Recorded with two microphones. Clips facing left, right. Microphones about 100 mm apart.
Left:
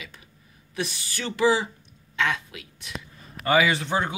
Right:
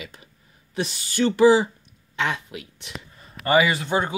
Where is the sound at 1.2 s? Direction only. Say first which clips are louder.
Right 7 dB; 25° right (ahead or behind).